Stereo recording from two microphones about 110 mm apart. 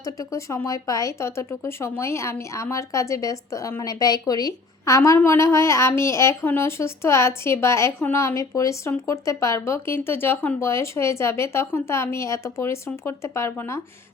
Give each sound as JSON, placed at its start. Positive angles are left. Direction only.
{"t": 0.0, "sound": "speech", "side_deg": 30}